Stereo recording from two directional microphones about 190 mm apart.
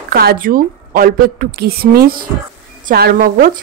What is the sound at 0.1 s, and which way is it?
Speech, 55° right (ahead or behind).